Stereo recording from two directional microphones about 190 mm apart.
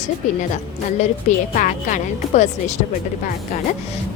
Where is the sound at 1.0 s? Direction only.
40° left (ahead or behind).